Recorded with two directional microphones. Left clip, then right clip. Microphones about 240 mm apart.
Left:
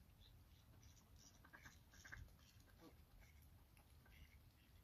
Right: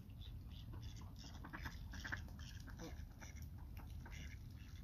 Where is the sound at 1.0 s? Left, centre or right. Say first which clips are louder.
Right 11 dB; left.